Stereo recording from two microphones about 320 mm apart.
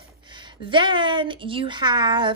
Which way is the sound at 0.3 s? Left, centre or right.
Centre.